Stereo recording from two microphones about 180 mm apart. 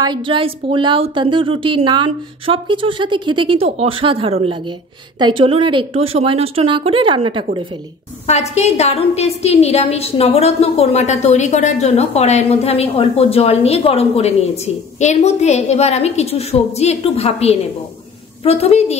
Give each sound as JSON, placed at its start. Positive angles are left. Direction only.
{"t": 0.0, "sound": "a woman's voice", "side_deg": -25}
{"t": 8.3, "sound": "a woman's voice", "side_deg": 40}